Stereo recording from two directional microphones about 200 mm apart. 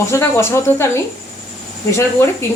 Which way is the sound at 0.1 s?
15° left (ahead or behind).